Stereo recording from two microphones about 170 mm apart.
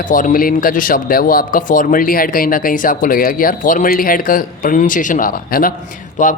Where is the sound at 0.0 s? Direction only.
50° left (ahead or behind).